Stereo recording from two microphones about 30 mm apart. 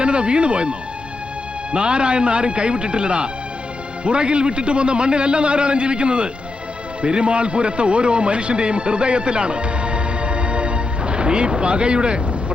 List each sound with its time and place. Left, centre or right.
0.0 s a man's voice: right